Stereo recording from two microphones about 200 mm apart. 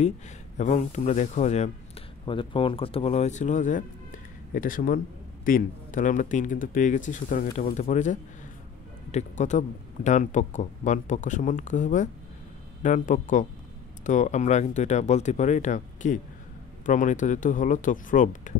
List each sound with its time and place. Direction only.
0.6 s speech: 35° left (ahead or behind)